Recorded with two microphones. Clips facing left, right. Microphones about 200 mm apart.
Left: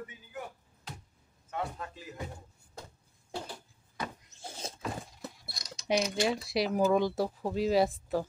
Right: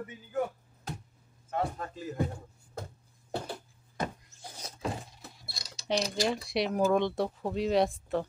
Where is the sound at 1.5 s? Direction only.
45° right (ahead or behind).